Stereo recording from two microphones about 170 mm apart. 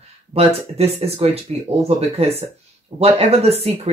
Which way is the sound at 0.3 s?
35° right (ahead or behind).